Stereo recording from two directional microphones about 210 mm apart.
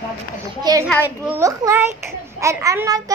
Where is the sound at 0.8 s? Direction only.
10° left (ahead or behind).